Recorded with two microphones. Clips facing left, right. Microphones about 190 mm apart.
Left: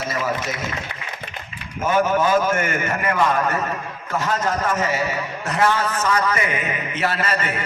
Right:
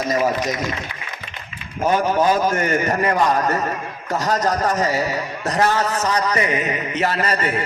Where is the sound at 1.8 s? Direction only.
40° right (ahead or behind).